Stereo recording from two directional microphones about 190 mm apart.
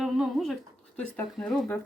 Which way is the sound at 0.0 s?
Centre (ahead or behind).